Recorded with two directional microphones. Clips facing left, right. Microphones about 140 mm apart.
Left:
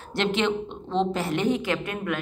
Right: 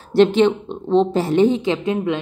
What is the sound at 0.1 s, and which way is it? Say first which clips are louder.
A woman's voice: right 11 dB; 35° right (ahead or behind).